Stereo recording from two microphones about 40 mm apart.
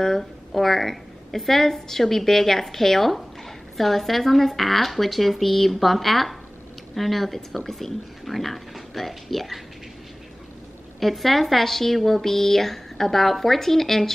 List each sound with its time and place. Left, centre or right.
0.0 s a woman's voice: centre
11.0 s a woman's voice: centre